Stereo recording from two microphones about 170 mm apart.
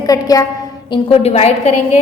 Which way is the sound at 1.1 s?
35° left (ahead or behind).